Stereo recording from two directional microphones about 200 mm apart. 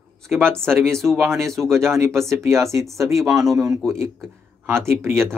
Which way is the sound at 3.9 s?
15° right (ahead or behind).